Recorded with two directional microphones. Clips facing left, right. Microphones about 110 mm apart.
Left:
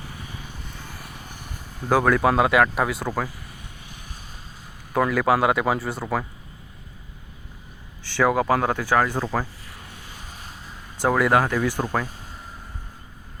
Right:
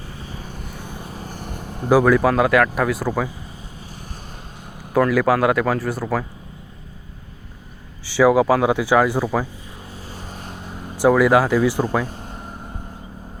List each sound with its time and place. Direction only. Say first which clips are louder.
0.3 s vehicle: right 4 dB; 35° right (ahead or behind)
0.7 s vehicle: right 5 dB; 15° right (ahead or behind)
1.0 s vehicle: right 7 dB; 35° right (ahead or behind); by 1.9 s 50° right (ahead or behind)
1.9 s speech: right 4 dB; 5° right (ahead or behind)
3.1 s speech: right 4 dB; 20° right (ahead or behind)
4.9 s speech: right 3 dB; centre (ahead or behind)
8.0 s speech: right 6 dB; 5° right (ahead or behind)
10.1 s vehicle: right 8 dB; 45° right (ahead or behind)
11.1 s speech: right 4 dB; 5° right (ahead or behind)
12.0 s vehicle: right 6 dB; 50° right (ahead or behind)